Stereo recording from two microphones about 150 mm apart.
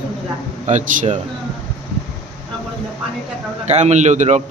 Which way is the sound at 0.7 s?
55° right (ahead or behind).